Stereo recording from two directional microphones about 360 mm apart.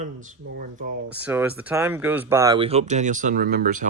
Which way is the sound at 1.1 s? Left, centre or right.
Centre.